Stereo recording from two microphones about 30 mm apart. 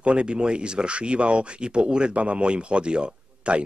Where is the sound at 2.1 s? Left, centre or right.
Right.